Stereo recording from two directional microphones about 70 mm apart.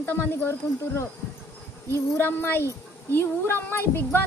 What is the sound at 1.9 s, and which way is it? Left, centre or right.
A woman's voice, left.